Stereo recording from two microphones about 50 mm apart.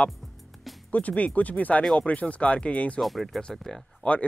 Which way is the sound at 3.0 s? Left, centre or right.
Centre.